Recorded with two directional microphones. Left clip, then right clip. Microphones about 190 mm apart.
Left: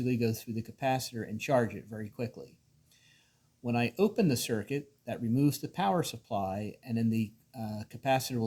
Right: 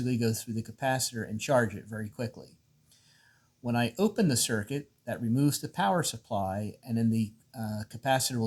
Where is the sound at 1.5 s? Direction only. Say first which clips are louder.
Right 2 dB; 30° right (ahead or behind).